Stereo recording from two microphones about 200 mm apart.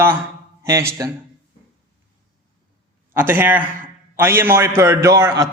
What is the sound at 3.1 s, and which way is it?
A man's voice, 10° right (ahead or behind).